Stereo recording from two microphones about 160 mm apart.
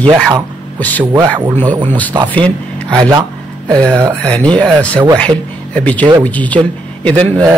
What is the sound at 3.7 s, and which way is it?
Speech, 5° left (ahead or behind).